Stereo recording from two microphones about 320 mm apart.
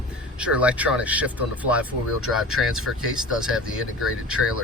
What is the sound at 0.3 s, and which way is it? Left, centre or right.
Speech, centre.